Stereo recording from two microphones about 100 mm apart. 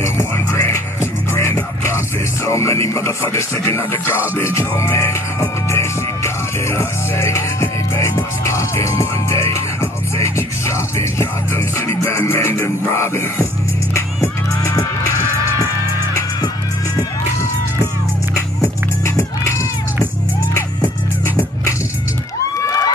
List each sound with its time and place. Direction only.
0.0 s music: 25° left (ahead or behind)
19.0 s music: 30° left (ahead or behind)
22.6 s cheering: 35° left (ahead or behind)